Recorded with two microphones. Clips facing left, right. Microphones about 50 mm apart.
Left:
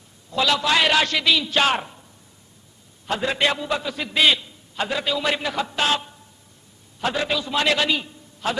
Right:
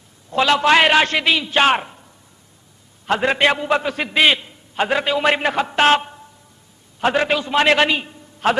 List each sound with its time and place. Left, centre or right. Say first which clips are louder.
0.3 s a man's voice: right 6 dB; right
3.1 s a man's voice: right 5 dB; right